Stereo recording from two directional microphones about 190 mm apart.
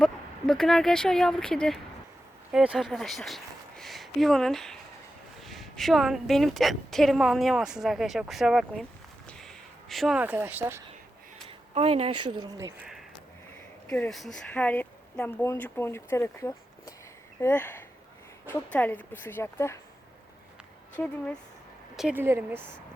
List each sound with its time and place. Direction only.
0.0 s a woman's voice: centre (ahead or behind)
9.2 s a sound: 5° left (ahead or behind)
11.4 s speech: 30° right (ahead or behind); by 12.9 s 15° right (ahead or behind)
13.9 s speech: 5° left (ahead or behind)
20.9 s speech: 5° left (ahead or behind)
21.9 s speech: 5° right (ahead or behind)